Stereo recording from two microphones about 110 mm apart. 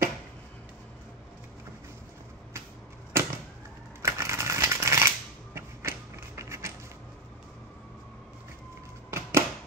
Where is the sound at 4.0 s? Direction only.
25° right (ahead or behind).